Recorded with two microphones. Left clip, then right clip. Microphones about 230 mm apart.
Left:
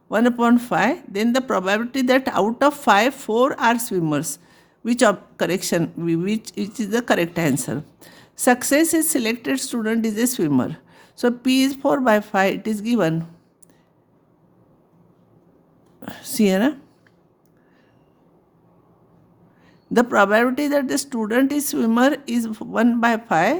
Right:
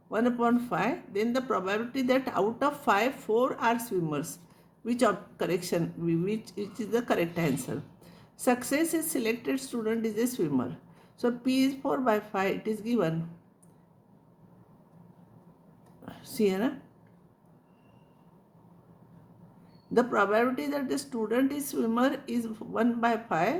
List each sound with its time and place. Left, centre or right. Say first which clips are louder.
0.1 s speech: left 9 dB; left
16.0 s speech: left 7 dB; left
19.9 s speech: left 9 dB; left